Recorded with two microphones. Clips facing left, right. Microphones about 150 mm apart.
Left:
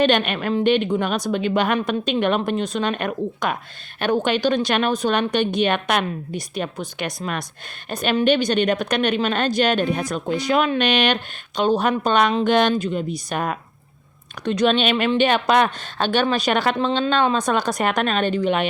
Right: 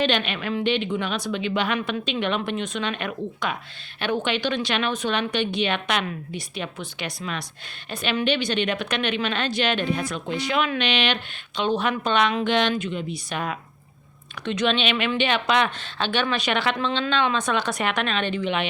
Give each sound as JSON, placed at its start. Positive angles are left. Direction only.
{"t": 0.0, "sound": "a woman's voice", "side_deg": 45}